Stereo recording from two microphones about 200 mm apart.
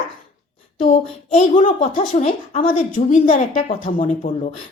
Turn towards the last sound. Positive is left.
turn(degrees=40)  # may be behind; listen again after turning